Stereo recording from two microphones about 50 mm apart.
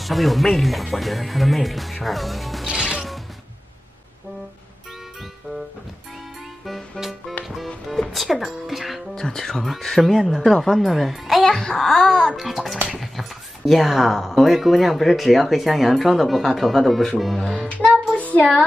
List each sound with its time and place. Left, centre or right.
0.0 s speech: centre
2.6 s music: centre
6.6 s music: centre
9.1 s speech: centre
11.4 s a sound: centre
12.4 s speech: centre
18.1 s child singing: left